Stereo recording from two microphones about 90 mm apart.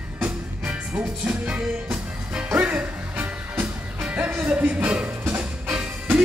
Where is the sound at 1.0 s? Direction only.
15° right (ahead or behind).